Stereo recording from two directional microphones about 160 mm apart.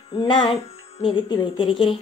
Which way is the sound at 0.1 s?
30° left (ahead or behind).